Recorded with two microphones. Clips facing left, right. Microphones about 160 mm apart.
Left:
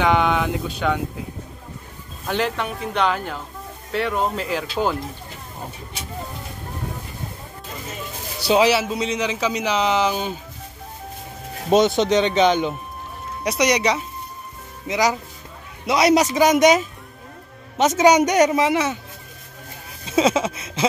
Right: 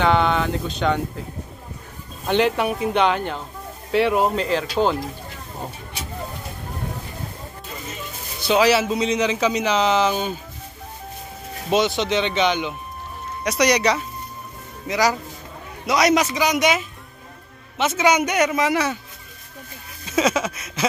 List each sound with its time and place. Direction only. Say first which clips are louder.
0.0 s speech: even; 10° left (ahead or behind)
2.2 s speech: right 4 dB; centre (ahead or behind)
4.4 s speech: right 3 dB; 5° left (ahead or behind)
8.5 s speech: even; 15° left (ahead or behind)
8.8 s speech: right 3 dB; 5° left (ahead or behind)
11.7 s a man's voice: left 4 dB; 45° left (ahead or behind)
13.4 s speech: right 1 dB; 25° left (ahead or behind)
14.9 s a sound: even; 20° left (ahead or behind)
16.3 s a woman's voice: left 5 dB; 45° left (ahead or behind); by 18.9 s 25° left (ahead or behind)
20.1 s a sound: left 2 dB; 30° left (ahead or behind)